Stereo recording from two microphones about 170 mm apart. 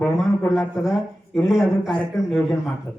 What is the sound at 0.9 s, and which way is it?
A man's voice, centre (ahead or behind).